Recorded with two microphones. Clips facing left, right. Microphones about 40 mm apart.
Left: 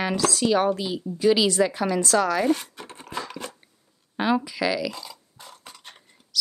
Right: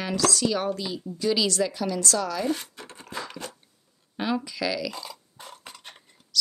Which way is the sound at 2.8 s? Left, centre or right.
Left.